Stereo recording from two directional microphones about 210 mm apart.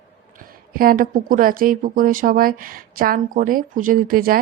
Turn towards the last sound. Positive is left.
turn(degrees=-45)  # may be behind; listen again after turning